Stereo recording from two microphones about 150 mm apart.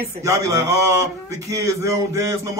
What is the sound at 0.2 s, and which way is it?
A man's voice, 20° right (ahead or behind).